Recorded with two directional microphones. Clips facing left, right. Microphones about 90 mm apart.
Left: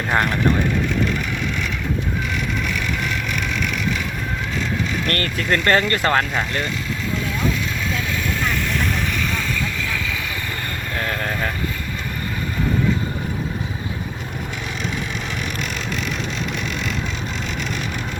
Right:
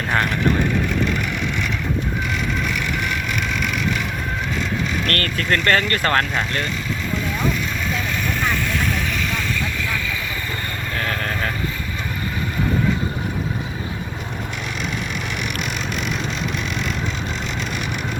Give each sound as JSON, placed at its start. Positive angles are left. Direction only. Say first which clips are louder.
{"t": 5.0, "sound": "speech", "louder": "even", "side_deg": 15}
{"t": 6.1, "sound": "speech", "louder": "even", "side_deg": 5}
{"t": 11.1, "sound": "vehicle", "louder": "left 1 dB", "side_deg": 15}